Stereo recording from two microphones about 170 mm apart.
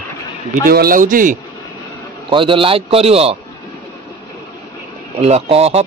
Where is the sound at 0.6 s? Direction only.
60° right (ahead or behind).